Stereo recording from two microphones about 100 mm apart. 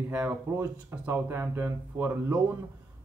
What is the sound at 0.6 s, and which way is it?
Speech, 25° right (ahead or behind).